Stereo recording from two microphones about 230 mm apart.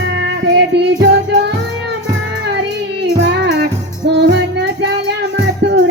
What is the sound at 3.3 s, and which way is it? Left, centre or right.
Music, right.